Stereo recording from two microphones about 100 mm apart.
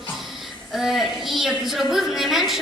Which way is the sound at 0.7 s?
5° right (ahead or behind).